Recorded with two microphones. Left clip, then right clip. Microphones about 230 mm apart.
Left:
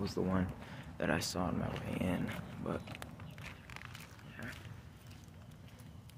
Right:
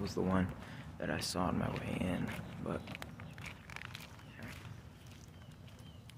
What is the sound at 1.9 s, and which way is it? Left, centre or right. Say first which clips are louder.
Walk: left 1 dB; centre.